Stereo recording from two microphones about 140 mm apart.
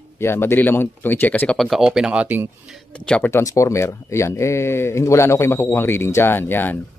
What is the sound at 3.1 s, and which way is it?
Speech, 15° left (ahead or behind).